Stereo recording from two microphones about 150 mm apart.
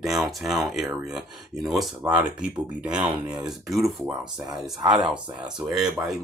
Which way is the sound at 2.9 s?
5° right (ahead or behind).